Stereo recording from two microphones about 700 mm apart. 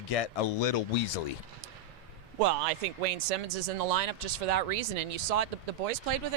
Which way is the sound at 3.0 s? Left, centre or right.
Right.